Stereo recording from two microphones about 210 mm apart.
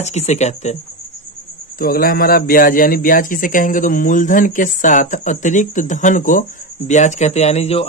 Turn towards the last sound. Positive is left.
turn(degrees=30)  # may be behind; listen again after turning